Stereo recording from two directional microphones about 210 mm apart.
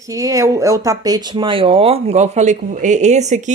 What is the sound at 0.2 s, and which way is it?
Speech, 15° right (ahead or behind).